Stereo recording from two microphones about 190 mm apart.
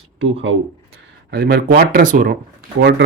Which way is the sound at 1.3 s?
55° right (ahead or behind).